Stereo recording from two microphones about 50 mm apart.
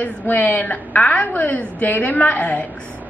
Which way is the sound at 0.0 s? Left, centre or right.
Left.